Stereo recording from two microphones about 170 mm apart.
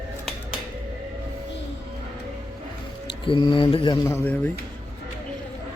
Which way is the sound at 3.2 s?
30° left (ahead or behind).